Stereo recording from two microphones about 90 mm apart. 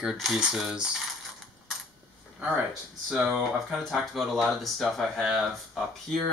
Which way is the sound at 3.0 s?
5° right (ahead or behind).